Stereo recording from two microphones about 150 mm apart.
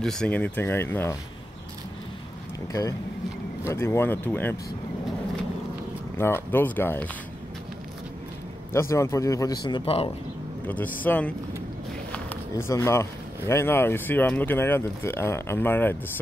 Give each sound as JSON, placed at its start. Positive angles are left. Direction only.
{"t": 0.0, "sound": "speech", "side_deg": 5}
{"t": 3.6, "sound": "speech", "side_deg": 20}
{"t": 6.1, "sound": "speech", "side_deg": 15}
{"t": 8.7, "sound": "speech", "side_deg": 20}
{"t": 10.7, "sound": "speech", "side_deg": 10}